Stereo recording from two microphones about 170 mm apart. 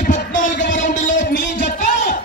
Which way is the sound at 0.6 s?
50° left (ahead or behind).